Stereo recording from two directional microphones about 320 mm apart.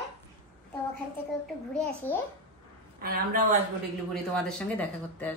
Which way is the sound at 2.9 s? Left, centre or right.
Right.